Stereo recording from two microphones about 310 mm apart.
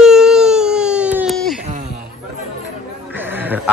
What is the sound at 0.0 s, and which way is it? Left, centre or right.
Baby cry, centre.